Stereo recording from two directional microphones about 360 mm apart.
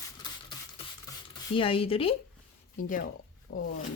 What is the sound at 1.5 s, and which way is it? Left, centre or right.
Speech, centre.